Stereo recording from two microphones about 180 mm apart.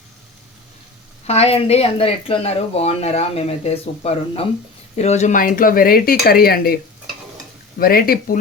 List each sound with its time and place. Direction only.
1.3 s speech: 35° left (ahead or behind); by 6.7 s 60° left (ahead or behind)
7.8 s speech: 55° left (ahead or behind)